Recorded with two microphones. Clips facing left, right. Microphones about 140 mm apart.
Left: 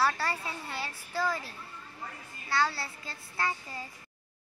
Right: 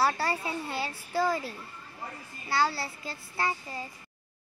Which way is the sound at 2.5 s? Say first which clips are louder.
Right 2 dB; 30° right (ahead or behind).